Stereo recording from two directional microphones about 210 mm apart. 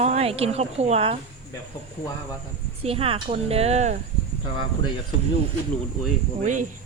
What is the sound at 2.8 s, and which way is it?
Speech, 30° right (ahead or behind).